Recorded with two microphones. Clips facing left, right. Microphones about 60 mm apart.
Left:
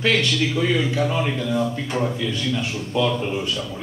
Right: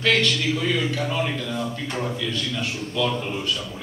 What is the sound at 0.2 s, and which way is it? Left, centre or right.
A man's voice, centre.